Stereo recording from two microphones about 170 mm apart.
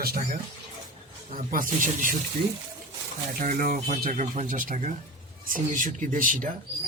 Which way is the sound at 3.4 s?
50° right (ahead or behind).